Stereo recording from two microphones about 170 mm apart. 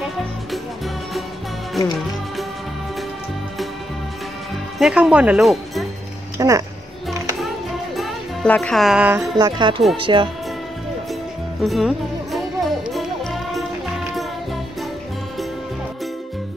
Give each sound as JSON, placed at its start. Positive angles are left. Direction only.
{"t": 4.7, "sound": "speech", "side_deg": 0}
{"t": 6.3, "sound": "speech", "side_deg": -20}
{"t": 7.9, "sound": "speech", "side_deg": 0}
{"t": 9.4, "sound": "speech", "side_deg": -25}
{"t": 11.6, "sound": "music", "side_deg": 0}